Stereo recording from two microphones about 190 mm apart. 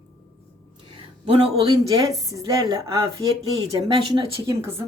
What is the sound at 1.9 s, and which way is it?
A woman's voice, 20° right (ahead or behind).